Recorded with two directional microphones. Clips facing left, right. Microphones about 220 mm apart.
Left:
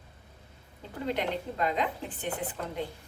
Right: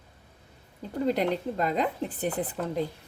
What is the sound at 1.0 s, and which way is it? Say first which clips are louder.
A woman's voice: right 5 dB; 40° right (ahead or behind).